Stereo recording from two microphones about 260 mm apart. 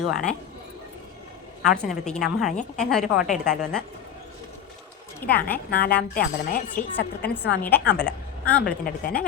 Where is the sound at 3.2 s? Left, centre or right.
Left.